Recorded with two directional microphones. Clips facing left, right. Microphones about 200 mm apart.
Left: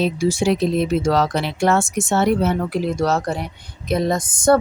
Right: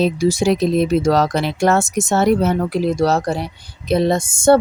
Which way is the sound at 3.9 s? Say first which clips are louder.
Right 4 dB; 30° right (ahead or behind).